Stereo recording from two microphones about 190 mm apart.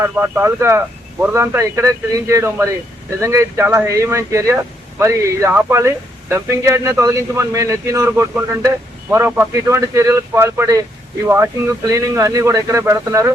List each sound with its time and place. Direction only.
0.0 s speech: 10° right (ahead or behind)
11.9 s speech: 15° right (ahead or behind)